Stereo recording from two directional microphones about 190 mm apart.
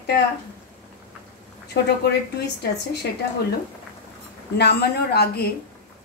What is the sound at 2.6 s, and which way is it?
Speech, 60° left (ahead or behind).